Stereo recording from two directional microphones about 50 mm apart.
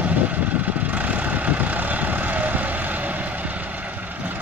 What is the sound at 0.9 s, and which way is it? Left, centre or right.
Vehicle, right.